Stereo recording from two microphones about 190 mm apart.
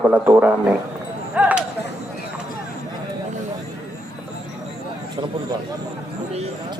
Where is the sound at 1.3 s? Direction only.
5° right (ahead or behind).